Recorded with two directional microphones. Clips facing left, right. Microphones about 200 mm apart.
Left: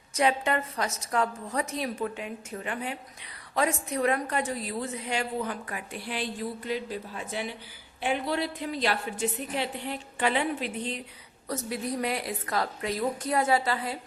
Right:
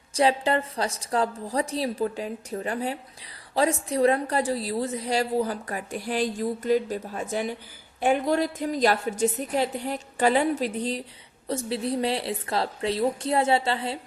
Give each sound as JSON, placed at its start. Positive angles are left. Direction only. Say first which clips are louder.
{"t": 0.1, "sound": "a woman's voice", "louder": "right 3 dB", "side_deg": -30}